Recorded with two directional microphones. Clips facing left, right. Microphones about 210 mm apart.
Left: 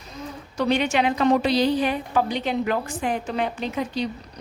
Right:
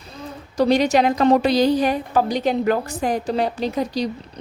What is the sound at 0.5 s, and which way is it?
A woman's voice, 40° right (ahead or behind).